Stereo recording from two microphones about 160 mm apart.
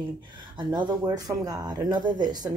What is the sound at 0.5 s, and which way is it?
Speech, 30° right (ahead or behind).